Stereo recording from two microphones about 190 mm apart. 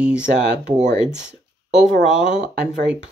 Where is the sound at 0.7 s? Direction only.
40° right (ahead or behind).